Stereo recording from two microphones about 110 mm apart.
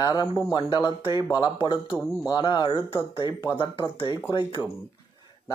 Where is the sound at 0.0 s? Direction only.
35° left (ahead or behind).